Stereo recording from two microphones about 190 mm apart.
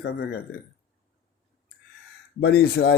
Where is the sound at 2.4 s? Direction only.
55° left (ahead or behind).